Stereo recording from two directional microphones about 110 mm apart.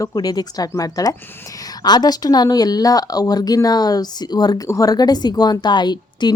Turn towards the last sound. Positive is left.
turn(degrees=40)  # may be behind; listen again after turning